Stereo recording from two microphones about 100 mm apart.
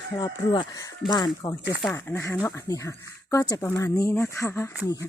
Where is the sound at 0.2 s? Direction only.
45° left (ahead or behind).